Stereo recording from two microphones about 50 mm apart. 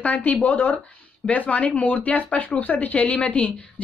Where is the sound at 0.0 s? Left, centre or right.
Left.